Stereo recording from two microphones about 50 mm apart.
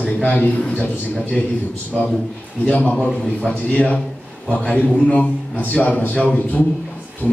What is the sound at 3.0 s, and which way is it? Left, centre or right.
A man's voice, left.